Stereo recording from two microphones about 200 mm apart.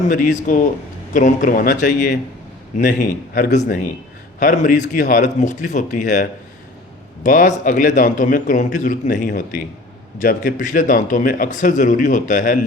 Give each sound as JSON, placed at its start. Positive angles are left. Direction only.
{"t": 0.1, "sound": "speech", "side_deg": 40}
{"t": 7.3, "sound": "speech", "side_deg": 40}